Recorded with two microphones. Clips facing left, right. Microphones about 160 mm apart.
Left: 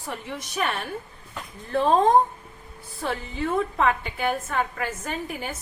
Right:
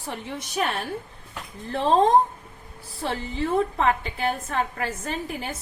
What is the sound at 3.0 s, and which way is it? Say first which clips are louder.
A woman's voice: right 1 dB; 30° right (ahead or behind).